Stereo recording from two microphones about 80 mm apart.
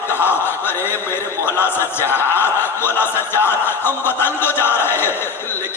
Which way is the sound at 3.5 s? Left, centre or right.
Left.